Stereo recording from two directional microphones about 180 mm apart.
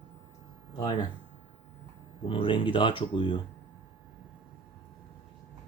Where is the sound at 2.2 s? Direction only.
30° left (ahead or behind).